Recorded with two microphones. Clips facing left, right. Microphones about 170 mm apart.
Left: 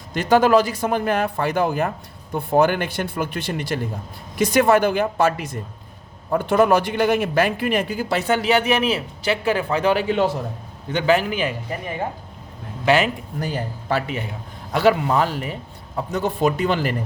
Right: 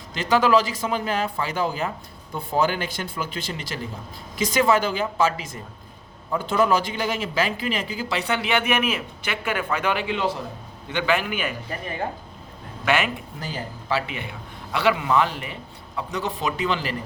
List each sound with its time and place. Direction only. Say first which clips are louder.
0.1 s a man's voice: left 4 dB; 50° left (ahead or behind); by 11.5 s 35° left (ahead or behind)
12.8 s a man's voice: left 5 dB; 35° left (ahead or behind)
13.4 s a man's voice: left 8 dB; 55° left (ahead or behind)